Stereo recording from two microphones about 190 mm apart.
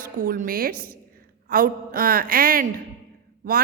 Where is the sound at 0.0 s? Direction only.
45° right (ahead or behind).